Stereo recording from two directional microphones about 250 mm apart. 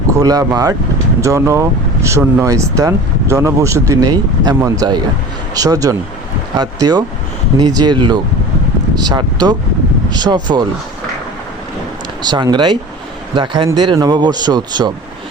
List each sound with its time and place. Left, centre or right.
0.1 s speech: centre
12.2 s speech: centre